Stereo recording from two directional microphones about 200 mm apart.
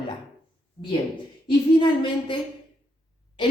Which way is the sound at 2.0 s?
25° left (ahead or behind).